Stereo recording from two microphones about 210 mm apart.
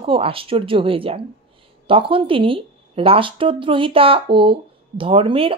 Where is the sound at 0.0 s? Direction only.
25° right (ahead or behind).